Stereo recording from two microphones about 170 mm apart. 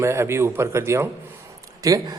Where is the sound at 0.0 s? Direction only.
15° right (ahead or behind).